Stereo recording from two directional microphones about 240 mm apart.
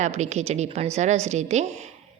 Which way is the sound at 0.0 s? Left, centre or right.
Right.